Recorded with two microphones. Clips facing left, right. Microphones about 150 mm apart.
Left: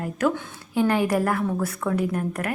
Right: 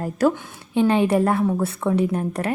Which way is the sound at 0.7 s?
20° right (ahead or behind).